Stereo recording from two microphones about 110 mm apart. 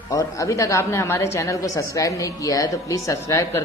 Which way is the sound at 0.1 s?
30° left (ahead or behind).